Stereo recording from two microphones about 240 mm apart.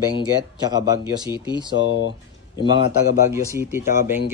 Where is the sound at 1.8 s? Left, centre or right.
Left.